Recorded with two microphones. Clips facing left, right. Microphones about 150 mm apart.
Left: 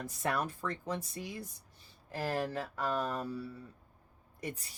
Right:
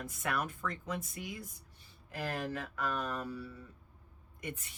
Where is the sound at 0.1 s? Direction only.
35° left (ahead or behind).